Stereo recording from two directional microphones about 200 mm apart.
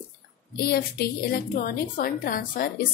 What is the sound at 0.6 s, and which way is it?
A woman's voice, 50° left (ahead or behind).